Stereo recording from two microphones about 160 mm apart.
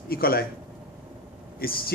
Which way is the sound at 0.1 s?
70° left (ahead or behind).